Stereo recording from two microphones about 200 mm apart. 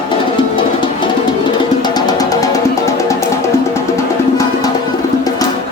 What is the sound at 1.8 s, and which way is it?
Music, 20° left (ahead or behind).